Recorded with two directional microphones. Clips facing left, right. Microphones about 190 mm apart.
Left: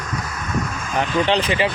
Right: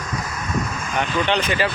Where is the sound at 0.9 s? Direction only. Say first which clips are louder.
Left 2 dB; 30° left (ahead or behind).